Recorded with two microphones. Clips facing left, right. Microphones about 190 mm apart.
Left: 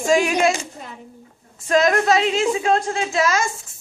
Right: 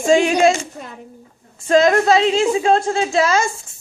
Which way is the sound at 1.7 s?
30° right (ahead or behind).